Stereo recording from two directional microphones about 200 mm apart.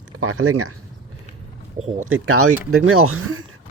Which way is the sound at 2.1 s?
90° right.